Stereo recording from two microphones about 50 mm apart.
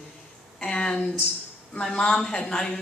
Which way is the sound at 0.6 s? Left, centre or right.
Centre.